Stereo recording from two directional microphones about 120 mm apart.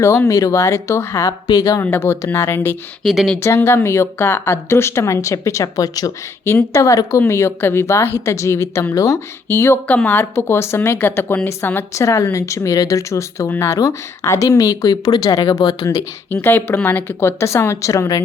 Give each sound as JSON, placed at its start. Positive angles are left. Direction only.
{"t": 0.0, "sound": "speech", "side_deg": 25}
{"t": 3.0, "sound": "speech", "side_deg": 0}
{"t": 3.4, "sound": "speech", "side_deg": 20}
{"t": 16.3, "sound": "speech", "side_deg": 20}